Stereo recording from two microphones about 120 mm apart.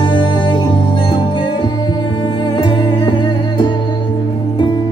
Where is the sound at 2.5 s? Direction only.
45° left (ahead or behind).